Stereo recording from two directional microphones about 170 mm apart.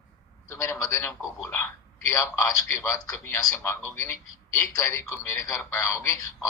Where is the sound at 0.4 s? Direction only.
15° left (ahead or behind).